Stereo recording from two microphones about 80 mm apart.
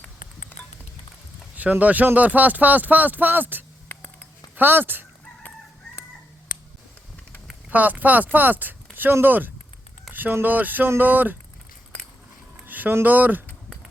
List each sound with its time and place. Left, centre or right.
1.5 s speech: right
7.7 s speech: right
12.6 s speech: right